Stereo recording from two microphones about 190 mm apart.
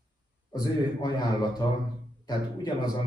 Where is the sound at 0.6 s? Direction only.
20° left (ahead or behind).